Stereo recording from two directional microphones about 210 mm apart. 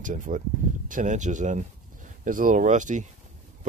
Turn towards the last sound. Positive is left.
turn(degrees=-35)  # may be behind; listen again after turning